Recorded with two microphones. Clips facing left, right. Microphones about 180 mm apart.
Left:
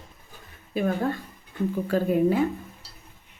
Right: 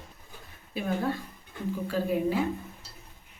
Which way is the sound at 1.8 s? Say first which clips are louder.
Left 5 dB; 55° left (ahead or behind).